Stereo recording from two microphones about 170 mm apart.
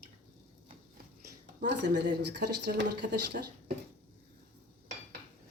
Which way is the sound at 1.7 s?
80° right.